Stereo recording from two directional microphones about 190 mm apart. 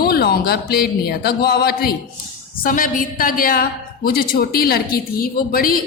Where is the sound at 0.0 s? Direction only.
55° left (ahead or behind).